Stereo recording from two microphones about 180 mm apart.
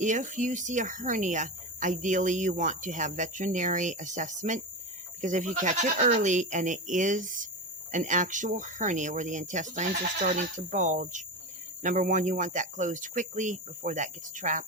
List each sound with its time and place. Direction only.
0.0 s speech: 45° right (ahead or behind)